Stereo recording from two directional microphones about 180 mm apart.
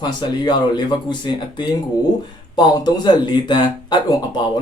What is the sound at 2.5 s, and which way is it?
Speech, 25° left (ahead or behind).